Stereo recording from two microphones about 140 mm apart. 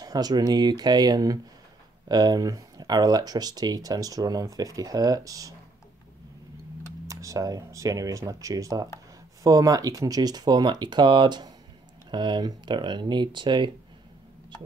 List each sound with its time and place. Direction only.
0.0 s speech: 30° right (ahead or behind)
7.1 s speech: 25° right (ahead or behind)